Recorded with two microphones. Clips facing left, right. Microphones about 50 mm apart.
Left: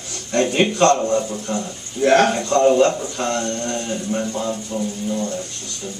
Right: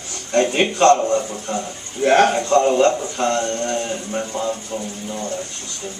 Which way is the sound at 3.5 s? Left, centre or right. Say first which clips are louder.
Right 2 dB; centre.